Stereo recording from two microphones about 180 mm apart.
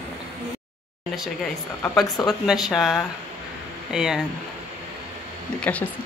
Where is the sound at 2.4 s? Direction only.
Centre (ahead or behind).